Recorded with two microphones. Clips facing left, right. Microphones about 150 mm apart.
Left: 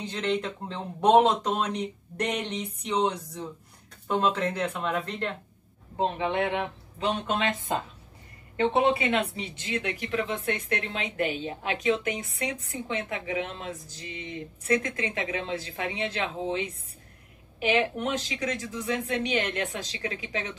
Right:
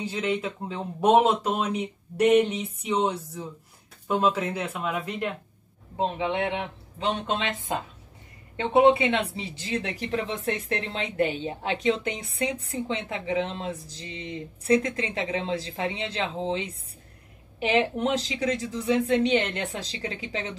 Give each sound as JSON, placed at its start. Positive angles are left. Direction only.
{"t": 0.0, "sound": "speech", "side_deg": -5}